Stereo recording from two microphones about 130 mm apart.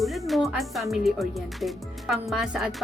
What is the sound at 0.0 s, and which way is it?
Speech, centre (ahead or behind).